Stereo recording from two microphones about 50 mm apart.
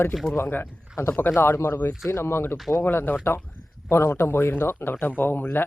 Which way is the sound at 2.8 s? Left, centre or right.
Left.